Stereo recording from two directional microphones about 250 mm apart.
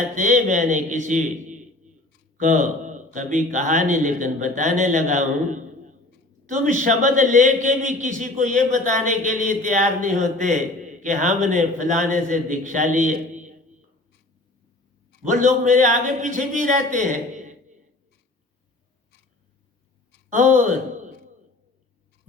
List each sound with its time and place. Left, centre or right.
0.2 s a man's voice: right
15.3 s a man's voice: right
20.3 s a man's voice: right